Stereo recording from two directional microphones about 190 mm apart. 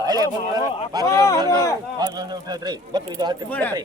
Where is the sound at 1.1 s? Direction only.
15° left (ahead or behind).